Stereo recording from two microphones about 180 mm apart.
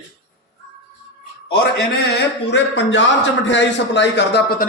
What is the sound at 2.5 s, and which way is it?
A man's voice, 85° left.